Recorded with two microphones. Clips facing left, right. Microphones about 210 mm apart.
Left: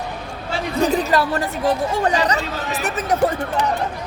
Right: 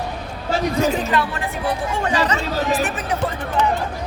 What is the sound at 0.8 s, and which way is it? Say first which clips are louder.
Speech: left 6 dB; 35° left (ahead or behind).